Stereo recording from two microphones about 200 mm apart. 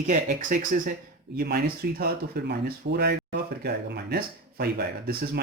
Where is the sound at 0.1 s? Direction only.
40° right (ahead or behind).